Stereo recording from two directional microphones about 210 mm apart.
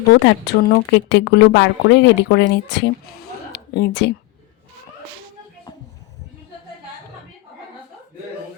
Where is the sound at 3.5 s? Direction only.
55° left (ahead or behind).